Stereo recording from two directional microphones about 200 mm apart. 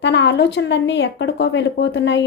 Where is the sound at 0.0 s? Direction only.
60° left (ahead or behind).